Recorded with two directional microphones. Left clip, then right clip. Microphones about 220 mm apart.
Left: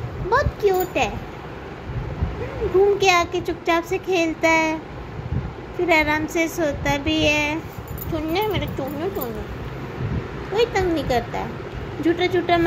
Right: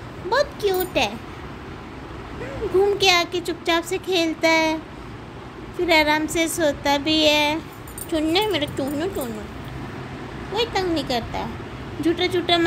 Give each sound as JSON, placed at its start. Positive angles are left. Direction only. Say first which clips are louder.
{"t": 0.3, "sound": "a woman's voice", "louder": "left 2 dB", "side_deg": -10}
{"t": 3.0, "sound": "a child's voice", "louder": "left 1 dB", "side_deg": -15}
{"t": 5.9, "sound": "a child's voice", "louder": "right 1 dB", "side_deg": -15}
{"t": 8.1, "sound": "speech", "louder": "right 2 dB", "side_deg": -30}
{"t": 10.5, "sound": "a child's voice", "louder": "left 2 dB", "side_deg": -5}